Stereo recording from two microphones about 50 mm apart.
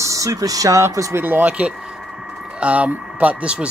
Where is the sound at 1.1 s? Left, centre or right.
Right.